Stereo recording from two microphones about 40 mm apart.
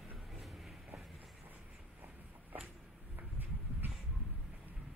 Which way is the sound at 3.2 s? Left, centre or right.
Right.